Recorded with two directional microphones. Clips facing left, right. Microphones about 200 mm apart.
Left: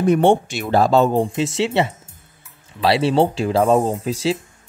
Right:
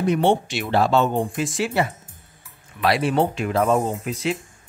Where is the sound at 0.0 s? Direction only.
50° left (ahead or behind); by 4.4 s 30° left (ahead or behind).